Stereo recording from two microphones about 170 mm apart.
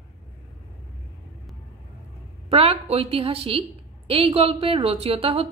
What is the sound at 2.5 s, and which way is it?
Speech, 35° right (ahead or behind).